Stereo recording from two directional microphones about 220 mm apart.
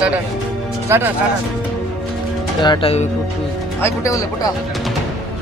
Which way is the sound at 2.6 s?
20° left (ahead or behind).